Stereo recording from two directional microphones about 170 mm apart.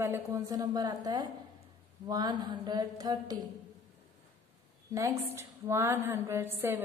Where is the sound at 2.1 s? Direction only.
25° right (ahead or behind).